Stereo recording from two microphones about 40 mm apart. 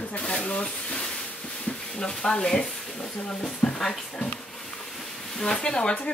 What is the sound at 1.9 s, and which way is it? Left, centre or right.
Speech, centre.